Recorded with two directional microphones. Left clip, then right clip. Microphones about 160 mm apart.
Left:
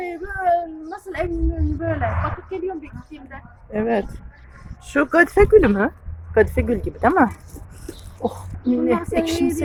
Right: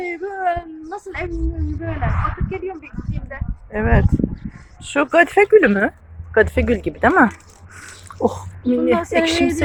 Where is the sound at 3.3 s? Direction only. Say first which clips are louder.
Even; 10° left (ahead or behind).